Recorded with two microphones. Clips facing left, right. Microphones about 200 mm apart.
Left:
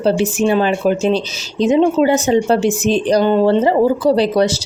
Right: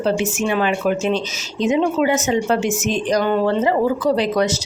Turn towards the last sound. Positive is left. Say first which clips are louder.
# left 4 dB
turn(degrees=30)  # may be behind; listen again after turning